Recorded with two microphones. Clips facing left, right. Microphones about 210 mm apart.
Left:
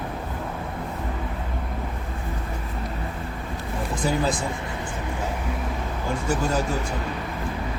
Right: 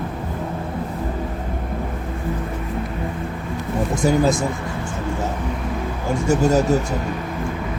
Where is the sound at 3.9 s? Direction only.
45° right (ahead or behind).